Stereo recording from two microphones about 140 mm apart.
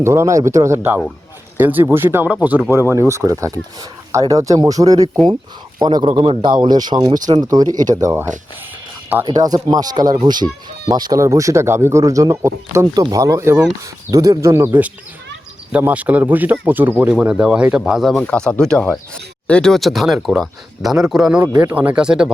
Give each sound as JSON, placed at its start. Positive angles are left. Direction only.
{"t": 0.0, "sound": "a man's voice", "side_deg": -20}
{"t": 18.2, "sound": "speech", "side_deg": 10}